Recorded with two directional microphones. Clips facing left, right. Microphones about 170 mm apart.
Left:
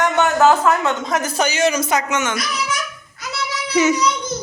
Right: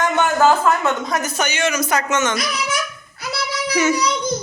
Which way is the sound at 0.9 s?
20° left (ahead or behind).